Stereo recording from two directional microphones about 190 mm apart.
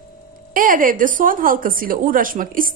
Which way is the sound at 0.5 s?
45° right (ahead or behind).